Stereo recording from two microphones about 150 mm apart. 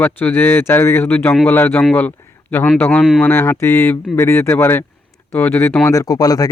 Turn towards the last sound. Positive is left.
turn(degrees=25)  # may be behind; listen again after turning